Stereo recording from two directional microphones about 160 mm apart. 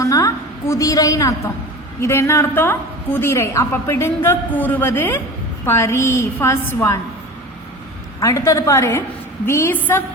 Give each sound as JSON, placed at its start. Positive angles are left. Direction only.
{"t": 0.0, "sound": "a woman's voice", "side_deg": 20}
{"t": 8.2, "sound": "a woman's voice", "side_deg": 20}